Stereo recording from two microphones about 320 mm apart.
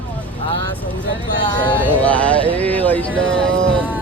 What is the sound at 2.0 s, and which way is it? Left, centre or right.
Speech, centre.